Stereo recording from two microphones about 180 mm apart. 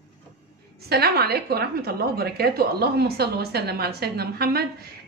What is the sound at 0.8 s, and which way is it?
A woman's voice, 60° right (ahead or behind).